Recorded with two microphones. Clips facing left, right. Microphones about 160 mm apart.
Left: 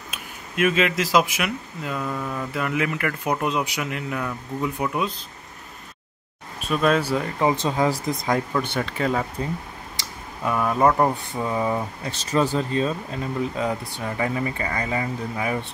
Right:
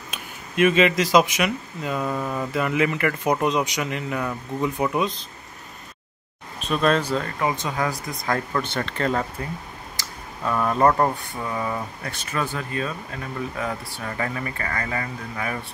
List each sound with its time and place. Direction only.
0.1 s speech: centre (ahead or behind)
2.5 s a man's voice: centre (ahead or behind)
6.7 s speech: 5° left (ahead or behind); by 8.4 s 25° left (ahead or behind)
8.5 s speech: 10° left (ahead or behind)
11.4 s speech: 20° left (ahead or behind)